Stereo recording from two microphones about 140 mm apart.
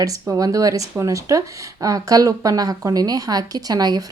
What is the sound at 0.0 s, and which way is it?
Speech, 25° right (ahead or behind).